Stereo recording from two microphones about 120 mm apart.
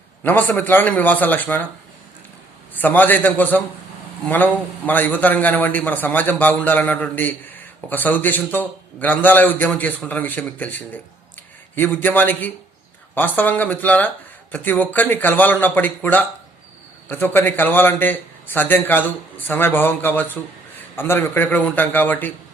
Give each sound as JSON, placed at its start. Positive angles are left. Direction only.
{"t": 0.2, "sound": "a man's voice", "side_deg": 15}
{"t": 2.7, "sound": "a man's voice", "side_deg": 15}